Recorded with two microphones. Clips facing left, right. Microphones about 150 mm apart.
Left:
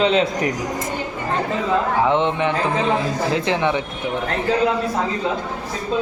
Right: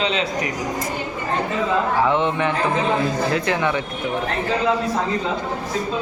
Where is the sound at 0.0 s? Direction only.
50° left (ahead or behind).